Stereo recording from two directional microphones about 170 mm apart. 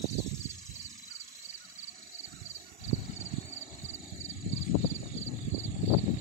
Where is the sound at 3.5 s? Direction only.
40° left (ahead or behind).